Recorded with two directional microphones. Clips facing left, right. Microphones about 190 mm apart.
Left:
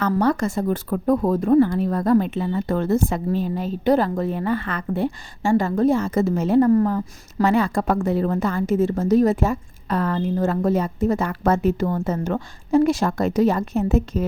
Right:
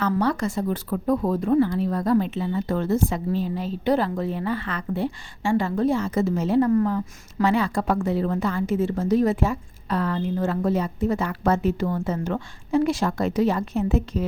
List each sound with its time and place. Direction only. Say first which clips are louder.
0.0 s speech: left 3 dB; 45° left (ahead or behind)